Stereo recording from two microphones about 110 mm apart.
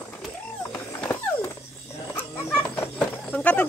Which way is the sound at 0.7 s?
15° left (ahead or behind).